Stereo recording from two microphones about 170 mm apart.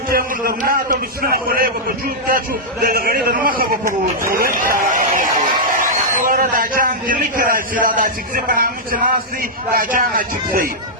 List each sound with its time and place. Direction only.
0.1 s a man's voice: 60° right (ahead or behind)